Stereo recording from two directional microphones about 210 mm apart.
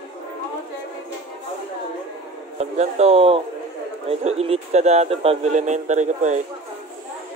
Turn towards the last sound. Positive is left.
turn(degrees=-35)  # may be behind; listen again after turning